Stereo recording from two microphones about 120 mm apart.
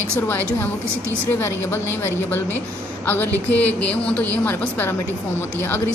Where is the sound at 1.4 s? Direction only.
20° left (ahead or behind).